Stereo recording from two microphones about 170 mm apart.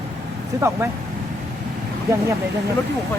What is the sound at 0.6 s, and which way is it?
Speech, 15° right (ahead or behind).